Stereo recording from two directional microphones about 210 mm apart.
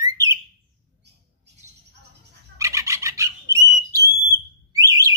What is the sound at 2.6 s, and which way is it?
Bird, 15° right (ahead or behind).